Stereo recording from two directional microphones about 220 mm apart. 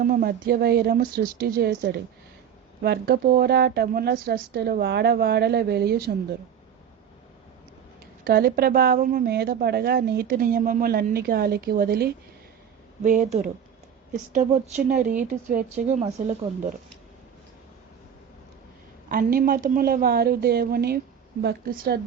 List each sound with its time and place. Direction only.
0.0 s a woman's voice: 40° right (ahead or behind)
8.2 s a woman's voice: 45° right (ahead or behind)
13.0 s a woman's voice: 30° right (ahead or behind)
19.0 s a woman's voice: 40° right (ahead or behind)